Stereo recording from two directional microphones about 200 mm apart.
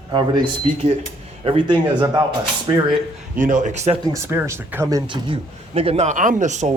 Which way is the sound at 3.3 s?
40° right (ahead or behind).